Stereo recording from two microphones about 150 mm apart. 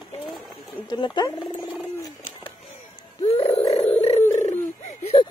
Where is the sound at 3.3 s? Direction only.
40° left (ahead or behind).